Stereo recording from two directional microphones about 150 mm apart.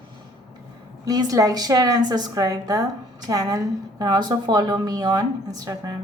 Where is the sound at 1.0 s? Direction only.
25° right (ahead or behind).